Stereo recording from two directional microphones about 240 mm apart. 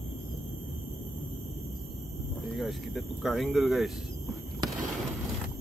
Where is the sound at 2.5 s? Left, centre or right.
Centre.